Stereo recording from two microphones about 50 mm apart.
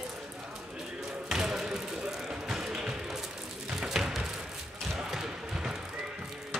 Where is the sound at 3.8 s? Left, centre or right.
Centre.